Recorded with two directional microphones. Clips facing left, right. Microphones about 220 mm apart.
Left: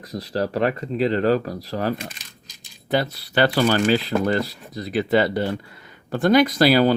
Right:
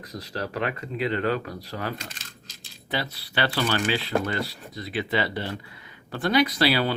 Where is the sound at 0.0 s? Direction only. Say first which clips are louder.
Left 8 dB; 35° left (ahead or behind).